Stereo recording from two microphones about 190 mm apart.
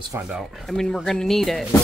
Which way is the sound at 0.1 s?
5° right (ahead or behind).